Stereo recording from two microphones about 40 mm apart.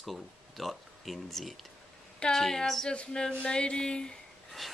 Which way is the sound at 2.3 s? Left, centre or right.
Centre.